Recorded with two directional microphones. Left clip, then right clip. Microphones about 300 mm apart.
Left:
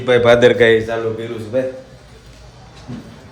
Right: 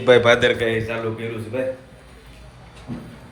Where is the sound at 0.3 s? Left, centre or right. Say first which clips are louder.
Left 8 dB; left.